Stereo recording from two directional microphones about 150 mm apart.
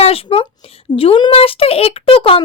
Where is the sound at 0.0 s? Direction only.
40° left (ahead or behind).